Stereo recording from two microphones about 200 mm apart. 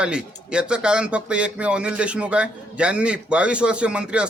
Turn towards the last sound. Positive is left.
turn(degrees=-5)  # may be behind; listen again after turning